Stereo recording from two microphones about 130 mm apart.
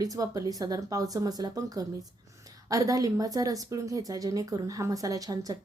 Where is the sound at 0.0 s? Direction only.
25° right (ahead or behind).